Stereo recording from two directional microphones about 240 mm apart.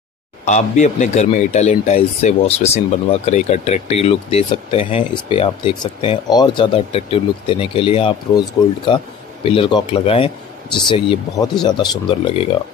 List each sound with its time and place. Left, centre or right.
0.5 s speech: left